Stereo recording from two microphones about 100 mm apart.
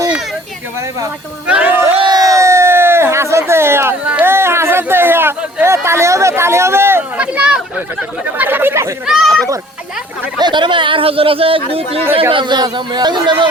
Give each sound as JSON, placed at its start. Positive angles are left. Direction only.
{"t": 1.5, "sound": "speech", "side_deg": -15}
{"t": 2.0, "sound": "a sound", "side_deg": -40}
{"t": 7.2, "sound": "a sound", "side_deg": -10}
{"t": 8.4, "sound": "speech", "side_deg": -20}
{"t": 9.0, "sound": "speech", "side_deg": -5}
{"t": 10.3, "sound": "speech", "side_deg": -50}
{"t": 12.3, "sound": "speech", "side_deg": -55}